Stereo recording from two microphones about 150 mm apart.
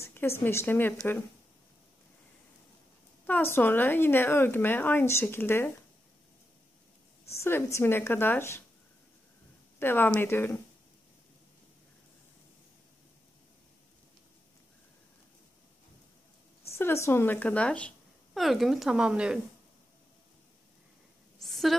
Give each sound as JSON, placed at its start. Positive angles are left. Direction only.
{"t": 0.0, "sound": "speech", "side_deg": 15}
{"t": 3.3, "sound": "speech", "side_deg": 15}
{"t": 7.3, "sound": "speech", "side_deg": 15}
{"t": 9.8, "sound": "speech", "side_deg": 15}
{"t": 16.7, "sound": "speech", "side_deg": 15}
{"t": 21.4, "sound": "a sound", "side_deg": 0}